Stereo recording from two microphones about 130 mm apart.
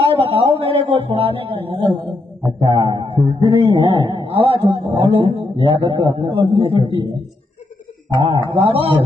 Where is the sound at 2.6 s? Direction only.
35° right (ahead or behind).